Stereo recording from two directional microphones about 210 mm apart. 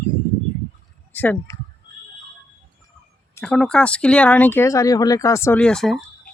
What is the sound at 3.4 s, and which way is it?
Speech, 5° left (ahead or behind).